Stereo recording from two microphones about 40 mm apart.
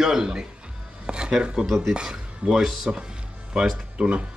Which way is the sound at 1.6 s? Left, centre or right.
Centre.